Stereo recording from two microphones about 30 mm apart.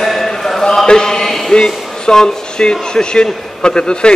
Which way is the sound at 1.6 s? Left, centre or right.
Left.